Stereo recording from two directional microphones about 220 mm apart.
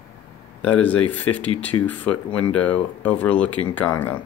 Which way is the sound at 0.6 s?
5° left (ahead or behind).